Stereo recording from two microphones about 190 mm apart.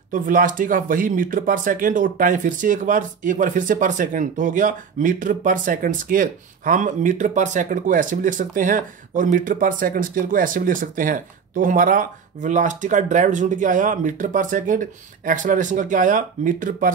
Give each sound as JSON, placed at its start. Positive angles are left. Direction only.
{"t": 0.1, "sound": "speech", "side_deg": -45}